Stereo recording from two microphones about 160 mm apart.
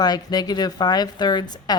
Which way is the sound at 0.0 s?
25° left (ahead or behind).